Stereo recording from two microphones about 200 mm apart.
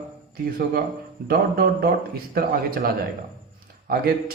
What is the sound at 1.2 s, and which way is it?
A man's voice, 50° right (ahead or behind).